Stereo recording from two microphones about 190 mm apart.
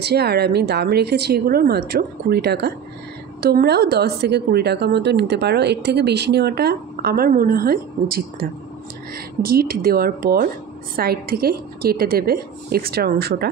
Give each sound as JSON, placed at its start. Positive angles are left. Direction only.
{"t": 0.0, "sound": "a woman's voice", "side_deg": -60}